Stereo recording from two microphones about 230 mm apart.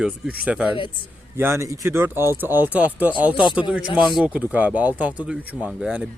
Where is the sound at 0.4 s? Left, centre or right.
Centre.